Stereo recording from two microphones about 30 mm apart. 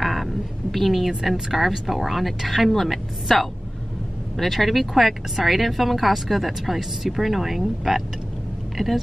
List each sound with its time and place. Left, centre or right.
0.0 s a woman's voice: centre
8.8 s speech: centre